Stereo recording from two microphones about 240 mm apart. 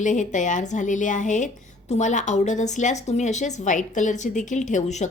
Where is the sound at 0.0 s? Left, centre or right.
Left.